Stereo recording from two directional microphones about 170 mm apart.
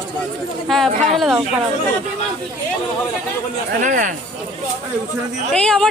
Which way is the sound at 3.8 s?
50° right (ahead or behind).